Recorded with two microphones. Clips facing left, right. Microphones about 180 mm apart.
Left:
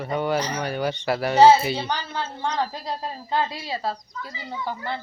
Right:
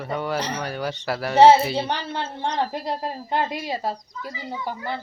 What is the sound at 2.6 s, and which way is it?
Speech, 25° right (ahead or behind).